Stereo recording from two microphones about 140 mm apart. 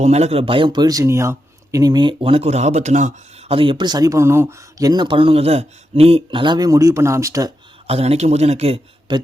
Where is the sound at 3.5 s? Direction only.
35° right (ahead or behind).